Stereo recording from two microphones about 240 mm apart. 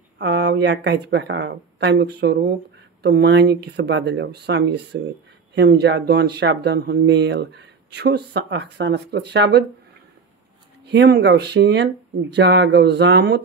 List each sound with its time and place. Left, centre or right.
0.2 s speech: right
10.9 s speech: right